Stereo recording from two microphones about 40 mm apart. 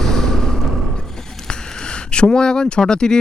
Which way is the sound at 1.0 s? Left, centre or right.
Centre.